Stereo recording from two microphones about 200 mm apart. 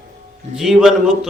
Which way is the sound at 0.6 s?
Centre (ahead or behind).